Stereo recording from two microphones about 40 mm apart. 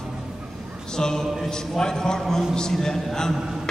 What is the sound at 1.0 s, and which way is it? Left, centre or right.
A man's voice, centre.